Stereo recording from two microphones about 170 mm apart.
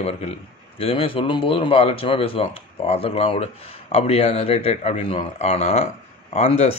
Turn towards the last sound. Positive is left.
turn(degrees=40)  # may be behind; listen again after turning